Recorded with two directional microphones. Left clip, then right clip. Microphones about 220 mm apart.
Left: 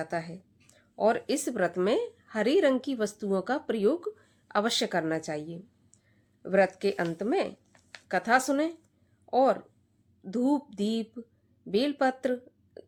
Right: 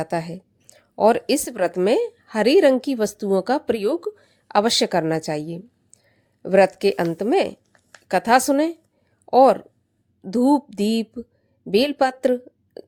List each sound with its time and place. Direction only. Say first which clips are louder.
0.0 s a woman's voice: right 8 dB; 35° right (ahead or behind)